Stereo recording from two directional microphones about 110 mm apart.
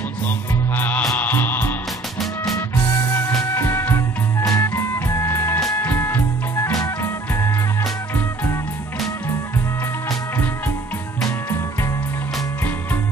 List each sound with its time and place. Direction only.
0.7 s music: 15° left (ahead or behind)